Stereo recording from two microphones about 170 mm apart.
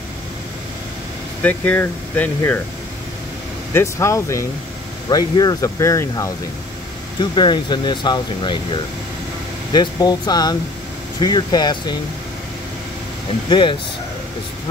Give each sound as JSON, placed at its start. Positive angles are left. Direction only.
{"t": 1.4, "sound": "speech", "side_deg": 10}
{"t": 3.7, "sound": "speech", "side_deg": 15}
{"t": 13.5, "sound": "speech", "side_deg": 30}